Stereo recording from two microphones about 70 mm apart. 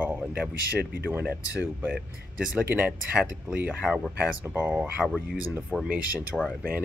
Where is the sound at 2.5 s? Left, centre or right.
Right.